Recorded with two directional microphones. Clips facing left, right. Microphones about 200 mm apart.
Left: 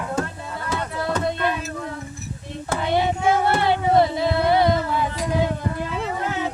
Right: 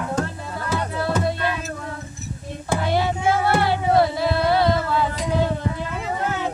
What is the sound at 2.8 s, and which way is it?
Child singing, 20° left (ahead or behind).